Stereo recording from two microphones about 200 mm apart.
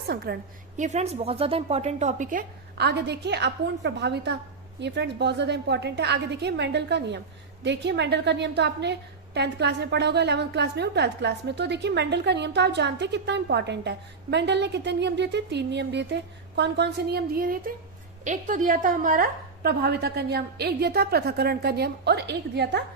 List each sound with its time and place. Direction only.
0.3 s a woman's voice: 50° right (ahead or behind)
0.8 s a woman's voice: 35° right (ahead or behind)
2.7 s a woman's voice: 55° right (ahead or behind)